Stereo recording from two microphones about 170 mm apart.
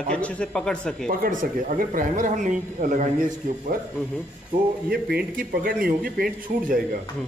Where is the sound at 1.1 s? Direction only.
55° right (ahead or behind).